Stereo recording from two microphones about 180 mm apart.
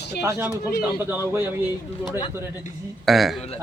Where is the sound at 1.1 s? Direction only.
10° right (ahead or behind).